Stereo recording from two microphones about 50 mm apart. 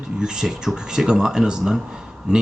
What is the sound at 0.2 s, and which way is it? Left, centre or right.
Speech, centre.